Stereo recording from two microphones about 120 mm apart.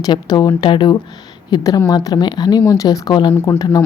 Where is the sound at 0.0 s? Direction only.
35° left (ahead or behind).